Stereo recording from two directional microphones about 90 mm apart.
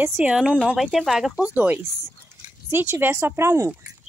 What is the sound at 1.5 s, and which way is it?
Speech, 20° right (ahead or behind).